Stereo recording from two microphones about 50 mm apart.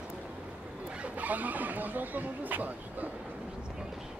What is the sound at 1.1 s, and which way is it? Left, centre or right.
Speech, right.